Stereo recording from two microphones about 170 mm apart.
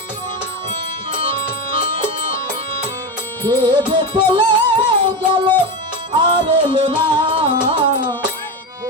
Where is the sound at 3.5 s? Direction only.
25° right (ahead or behind).